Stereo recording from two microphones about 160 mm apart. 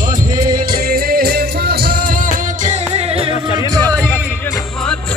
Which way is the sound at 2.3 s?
50° right (ahead or behind).